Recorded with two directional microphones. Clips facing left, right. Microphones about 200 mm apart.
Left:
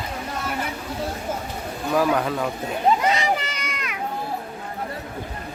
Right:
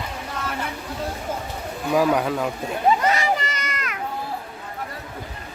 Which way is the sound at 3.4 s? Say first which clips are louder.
Right 2 dB; centre (ahead or behind).